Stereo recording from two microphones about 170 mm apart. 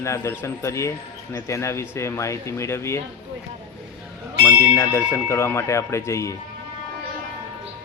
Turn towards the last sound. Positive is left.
turn(degrees=15)  # may be behind; listen again after turning